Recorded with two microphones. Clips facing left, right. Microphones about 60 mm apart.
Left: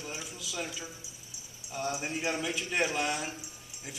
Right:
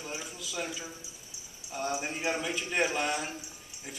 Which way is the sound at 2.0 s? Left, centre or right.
Centre.